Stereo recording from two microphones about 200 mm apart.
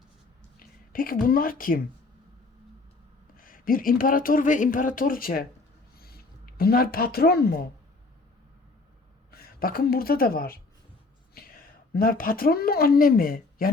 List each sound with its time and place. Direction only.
0.6 s a woman's voice: 45° left (ahead or behind)
3.3 s speech: 45° left (ahead or behind)
9.3 s a woman's voice: 50° left (ahead or behind)